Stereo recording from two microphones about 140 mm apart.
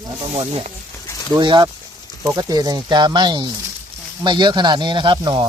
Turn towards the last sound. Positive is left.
turn(degrees=-35)  # may be behind; listen again after turning